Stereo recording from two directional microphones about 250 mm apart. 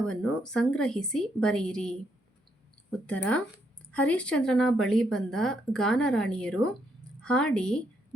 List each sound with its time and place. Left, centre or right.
0.0 s a woman's voice: centre
3.9 s a woman's voice: centre